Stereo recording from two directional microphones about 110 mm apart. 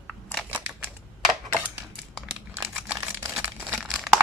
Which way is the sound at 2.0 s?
5° left (ahead or behind).